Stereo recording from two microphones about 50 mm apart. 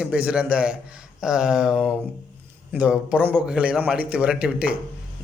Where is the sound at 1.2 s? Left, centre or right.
Centre.